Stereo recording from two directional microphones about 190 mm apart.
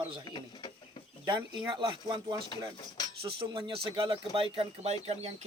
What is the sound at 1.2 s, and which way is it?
Speech, 20° right (ahead or behind).